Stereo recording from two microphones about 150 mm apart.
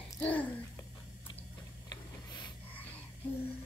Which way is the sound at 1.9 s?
30° left (ahead or behind).